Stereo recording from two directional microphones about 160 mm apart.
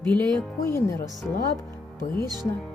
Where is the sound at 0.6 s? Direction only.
15° left (ahead or behind).